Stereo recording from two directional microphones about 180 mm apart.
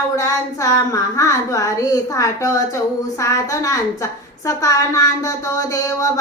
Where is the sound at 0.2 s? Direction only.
20° left (ahead or behind).